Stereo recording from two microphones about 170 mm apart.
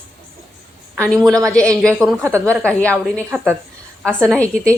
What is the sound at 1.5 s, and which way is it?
A woman's voice, 5° left (ahead or behind).